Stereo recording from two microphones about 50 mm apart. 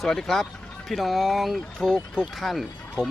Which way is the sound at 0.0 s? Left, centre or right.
Centre.